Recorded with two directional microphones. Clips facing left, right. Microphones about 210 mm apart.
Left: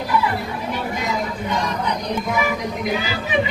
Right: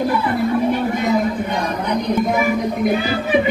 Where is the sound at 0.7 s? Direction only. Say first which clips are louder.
Right 7 dB; 55° right (ahead or behind).